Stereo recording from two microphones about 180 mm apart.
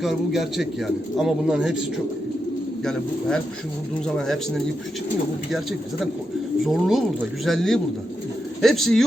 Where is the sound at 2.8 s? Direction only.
5° left (ahead or behind).